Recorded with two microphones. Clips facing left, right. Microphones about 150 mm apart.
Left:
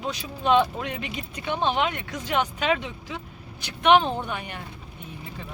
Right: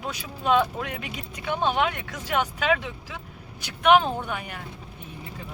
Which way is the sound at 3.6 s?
10° right (ahead or behind).